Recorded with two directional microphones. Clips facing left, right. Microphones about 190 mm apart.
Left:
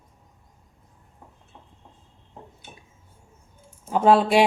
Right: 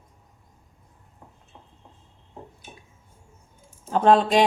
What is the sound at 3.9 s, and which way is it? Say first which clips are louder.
Speech: even; 5° left (ahead or behind).